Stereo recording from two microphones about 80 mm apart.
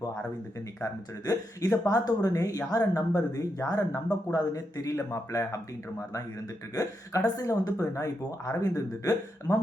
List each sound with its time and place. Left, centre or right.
1.2 s a woman's voice: left
6.7 s a woman's voice: left